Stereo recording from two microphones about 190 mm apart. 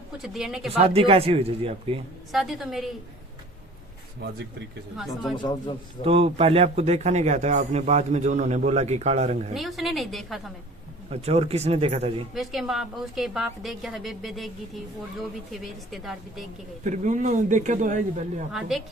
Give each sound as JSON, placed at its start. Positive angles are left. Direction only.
{"t": 0.2, "sound": "a woman's voice", "side_deg": 0}
{"t": 0.8, "sound": "a man's voice", "side_deg": -30}
{"t": 2.3, "sound": "a woman's voice", "side_deg": 0}
{"t": 4.2, "sound": "speech", "side_deg": -65}
{"t": 4.9, "sound": "a woman's voice", "side_deg": 0}
{"t": 5.4, "sound": "a man's voice", "side_deg": 25}
{"t": 6.1, "sound": "a man's voice", "side_deg": -30}
{"t": 9.6, "sound": "a woman's voice", "side_deg": 0}
{"t": 11.1, "sound": "a man's voice", "side_deg": -35}
{"t": 12.3, "sound": "a woman's voice", "side_deg": 0}
{"t": 15.6, "sound": "a woman's voice", "side_deg": 0}
{"t": 16.8, "sound": "a man's voice", "side_deg": -40}